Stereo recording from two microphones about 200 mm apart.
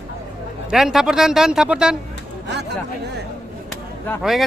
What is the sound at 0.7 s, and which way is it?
Speech, centre (ahead or behind).